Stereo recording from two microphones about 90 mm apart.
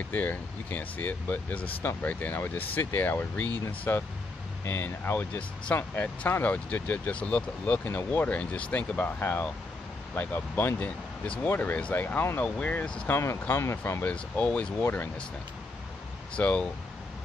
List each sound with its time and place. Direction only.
0.1 s speech: 20° left (ahead or behind)
13.1 s speech: 30° left (ahead or behind)
14.0 s speech: 15° left (ahead or behind)
16.3 s speech: 15° left (ahead or behind)